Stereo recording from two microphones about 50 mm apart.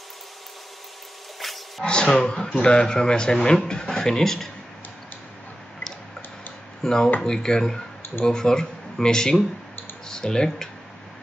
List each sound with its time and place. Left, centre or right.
1.4 s a sound: centre
1.9 s speech: centre
6.8 s speech: centre